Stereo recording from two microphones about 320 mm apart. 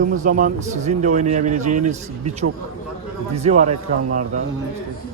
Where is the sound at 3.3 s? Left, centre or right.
Right.